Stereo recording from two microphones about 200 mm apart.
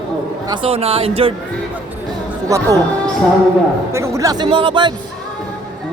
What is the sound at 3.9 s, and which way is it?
Speech, 15° right (ahead or behind).